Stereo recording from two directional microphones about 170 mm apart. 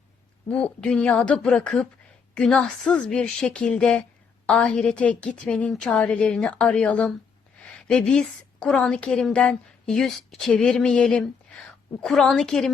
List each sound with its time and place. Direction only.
0.4 s a woman's voice: 5° left (ahead or behind)